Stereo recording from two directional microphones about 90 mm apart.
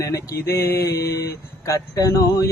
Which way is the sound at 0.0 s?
35° left (ahead or behind).